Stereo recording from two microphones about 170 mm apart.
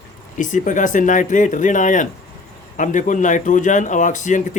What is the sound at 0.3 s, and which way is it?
Speech, 50° left (ahead or behind).